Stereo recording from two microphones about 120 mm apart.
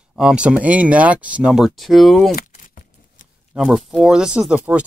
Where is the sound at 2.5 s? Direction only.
90° left.